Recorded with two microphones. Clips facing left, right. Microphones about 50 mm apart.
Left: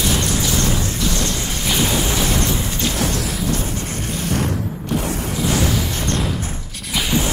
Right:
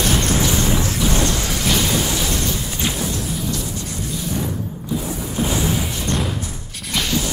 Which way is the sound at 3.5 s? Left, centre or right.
Left.